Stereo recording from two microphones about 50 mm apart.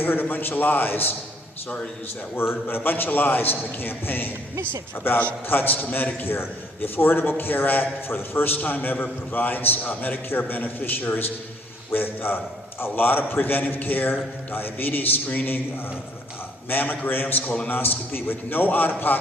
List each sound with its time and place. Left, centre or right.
0.0 s a man's voice: left
2.3 s a man's voice: left
16.6 s a man's voice: left
17.4 s a man's voice: left
17.7 s a man's voice: left